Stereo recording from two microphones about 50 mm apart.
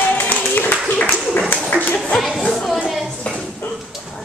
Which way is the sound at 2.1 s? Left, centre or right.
Centre.